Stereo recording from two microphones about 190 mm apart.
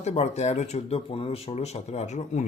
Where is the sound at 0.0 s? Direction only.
35° left (ahead or behind).